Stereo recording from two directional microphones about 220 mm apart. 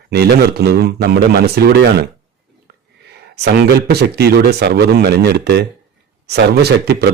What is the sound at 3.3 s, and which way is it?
Speech, 45° right (ahead or behind).